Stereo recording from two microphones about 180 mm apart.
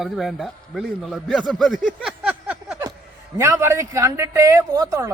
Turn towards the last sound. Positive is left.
turn(degrees=-20)  # may be behind; listen again after turning